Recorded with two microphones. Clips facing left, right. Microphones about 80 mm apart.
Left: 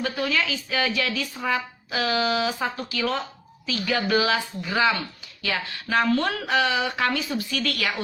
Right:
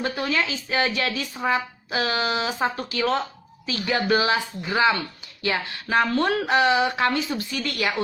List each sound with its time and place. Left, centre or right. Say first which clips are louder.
0.0 s speech: right 1 dB; right